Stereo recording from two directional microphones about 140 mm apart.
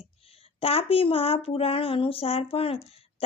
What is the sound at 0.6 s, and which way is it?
Speech, 45° left (ahead or behind).